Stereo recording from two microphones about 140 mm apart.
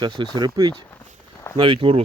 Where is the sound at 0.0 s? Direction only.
35° right (ahead or behind).